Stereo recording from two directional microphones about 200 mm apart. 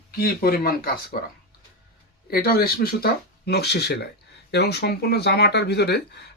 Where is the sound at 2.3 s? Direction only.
50° left (ahead or behind).